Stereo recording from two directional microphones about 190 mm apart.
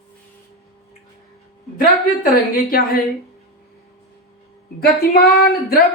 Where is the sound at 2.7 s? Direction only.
50° left (ahead or behind).